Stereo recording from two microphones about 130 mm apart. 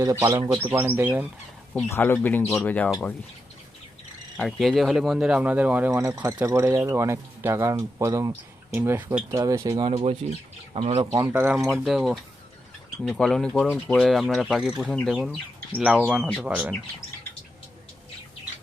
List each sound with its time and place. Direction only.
0.0 s speech: 30° right (ahead or behind)
0.3 s speech: 15° right (ahead or behind)
1.9 s speech: 15° left (ahead or behind)
4.4 s speech: centre (ahead or behind)
5.9 s speech: 25° right (ahead or behind)
9.9 s speech: 45° right (ahead or behind)
11.0 s speech: 30° right (ahead or behind)
11.3 s speech: 15° right (ahead or behind)
11.7 s speech: centre (ahead or behind)